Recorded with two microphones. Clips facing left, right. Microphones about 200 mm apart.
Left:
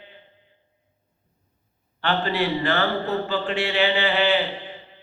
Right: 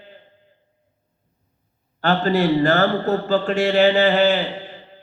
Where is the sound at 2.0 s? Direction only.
40° right (ahead or behind).